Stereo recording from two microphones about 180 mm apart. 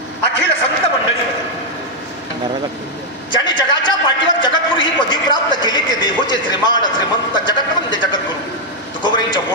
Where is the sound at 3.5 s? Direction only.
25° left (ahead or behind).